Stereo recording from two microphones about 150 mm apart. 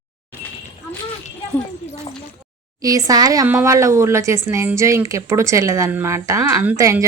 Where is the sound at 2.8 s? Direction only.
25° right (ahead or behind).